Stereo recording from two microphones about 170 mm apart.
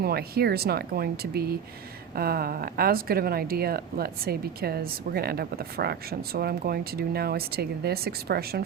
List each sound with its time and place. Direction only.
0.0 s speech: 65° right (ahead or behind)